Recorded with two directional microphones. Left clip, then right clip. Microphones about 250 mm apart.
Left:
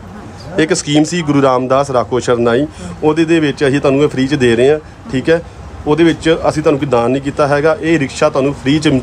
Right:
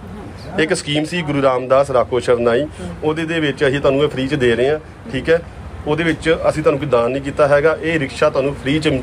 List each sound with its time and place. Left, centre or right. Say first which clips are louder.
0.6 s a man's voice: left 5 dB; left